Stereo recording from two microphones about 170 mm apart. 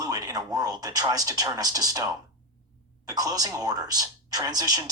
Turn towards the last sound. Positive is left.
turn(degrees=-20)  # may be behind; listen again after turning